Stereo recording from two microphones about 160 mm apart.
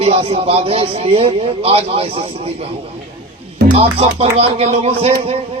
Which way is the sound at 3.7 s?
40° right (ahead or behind).